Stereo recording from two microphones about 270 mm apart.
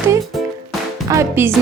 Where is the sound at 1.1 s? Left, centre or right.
Centre.